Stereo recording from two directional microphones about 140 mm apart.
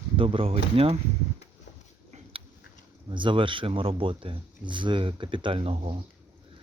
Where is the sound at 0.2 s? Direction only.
40° right (ahead or behind).